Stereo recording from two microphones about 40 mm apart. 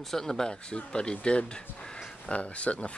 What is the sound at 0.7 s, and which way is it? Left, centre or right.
Speech, left.